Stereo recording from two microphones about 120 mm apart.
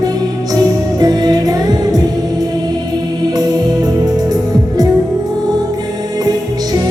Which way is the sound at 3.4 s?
30° right (ahead or behind).